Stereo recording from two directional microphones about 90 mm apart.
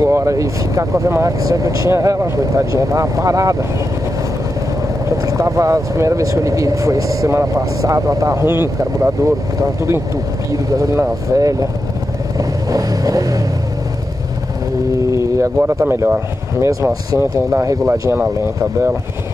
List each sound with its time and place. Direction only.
0.0 s speech: 35° right (ahead or behind)
5.2 s speech: 35° right (ahead or behind)
8.5 s speech: 25° right (ahead or behind)
12.4 s vehicle: 40° right (ahead or behind)
15.3 s speech: 35° right (ahead or behind)
18.1 s speech: 25° right (ahead or behind)